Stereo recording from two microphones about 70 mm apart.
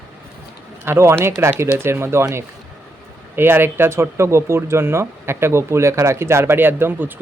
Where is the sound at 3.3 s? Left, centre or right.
Right.